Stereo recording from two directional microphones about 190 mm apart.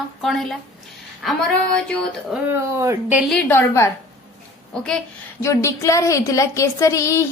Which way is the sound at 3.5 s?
15° left (ahead or behind).